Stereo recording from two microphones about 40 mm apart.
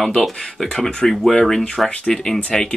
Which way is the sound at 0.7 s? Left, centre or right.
Left.